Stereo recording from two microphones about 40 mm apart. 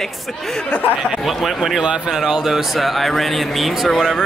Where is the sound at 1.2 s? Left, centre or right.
Centre.